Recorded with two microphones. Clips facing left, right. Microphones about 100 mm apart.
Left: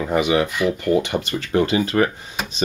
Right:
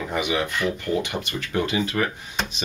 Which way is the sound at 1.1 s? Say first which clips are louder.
Left 6 dB; 30° left (ahead or behind).